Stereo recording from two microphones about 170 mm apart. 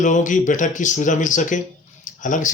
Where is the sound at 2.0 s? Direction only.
50° left (ahead or behind).